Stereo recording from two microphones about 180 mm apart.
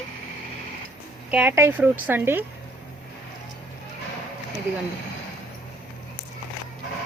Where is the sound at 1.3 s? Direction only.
10° right (ahead or behind).